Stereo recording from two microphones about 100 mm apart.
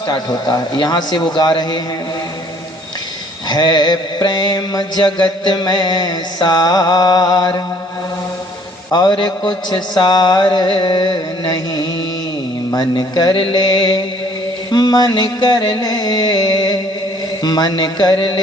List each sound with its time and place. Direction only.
0.1 s mantra: 45° left (ahead or behind)
3.5 s mantra: 45° left (ahead or behind)
8.9 s mantra: 45° left (ahead or behind)
14.7 s music: 45° left (ahead or behind)
17.4 s mantra: 45° left (ahead or behind)